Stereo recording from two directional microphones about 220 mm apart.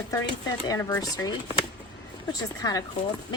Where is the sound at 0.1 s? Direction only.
15° left (ahead or behind).